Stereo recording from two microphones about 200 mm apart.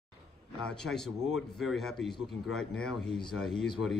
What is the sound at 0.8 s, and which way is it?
Speech, centre (ahead or behind).